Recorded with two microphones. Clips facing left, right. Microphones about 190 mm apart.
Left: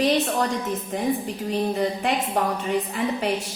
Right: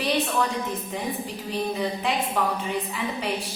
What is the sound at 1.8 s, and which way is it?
Speech, 45° left (ahead or behind).